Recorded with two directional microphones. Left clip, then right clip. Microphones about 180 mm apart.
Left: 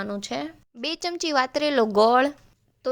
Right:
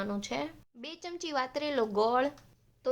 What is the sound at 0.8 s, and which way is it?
Speech, 50° left (ahead or behind).